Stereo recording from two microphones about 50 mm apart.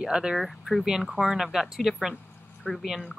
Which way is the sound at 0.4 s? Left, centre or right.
Centre.